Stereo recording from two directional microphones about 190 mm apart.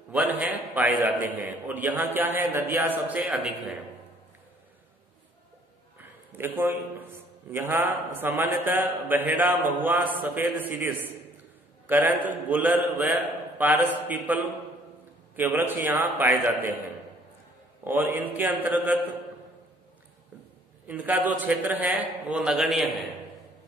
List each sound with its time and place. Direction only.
0.1 s a man's voice: 10° right (ahead or behind)
5.9 s a man's voice: 10° right (ahead or behind)
17.8 s a man's voice: 10° right (ahead or behind)
20.8 s a man's voice: 10° right (ahead or behind)